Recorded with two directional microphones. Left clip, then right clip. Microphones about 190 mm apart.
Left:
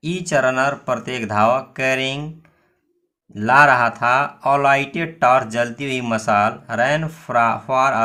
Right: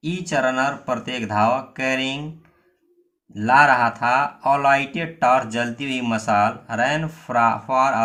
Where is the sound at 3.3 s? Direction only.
30° left (ahead or behind).